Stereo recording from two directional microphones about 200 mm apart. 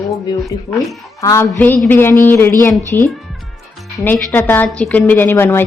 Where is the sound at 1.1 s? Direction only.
15° left (ahead or behind).